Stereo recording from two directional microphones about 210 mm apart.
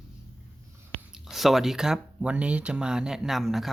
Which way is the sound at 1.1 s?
Centre (ahead or behind).